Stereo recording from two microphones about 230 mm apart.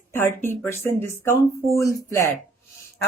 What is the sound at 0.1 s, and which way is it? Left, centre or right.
Speech, centre.